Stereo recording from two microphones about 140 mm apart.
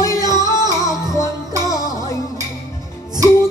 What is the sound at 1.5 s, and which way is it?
Music, 25° right (ahead or behind).